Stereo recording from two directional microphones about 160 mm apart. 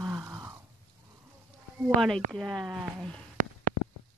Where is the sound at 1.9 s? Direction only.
Centre (ahead or behind).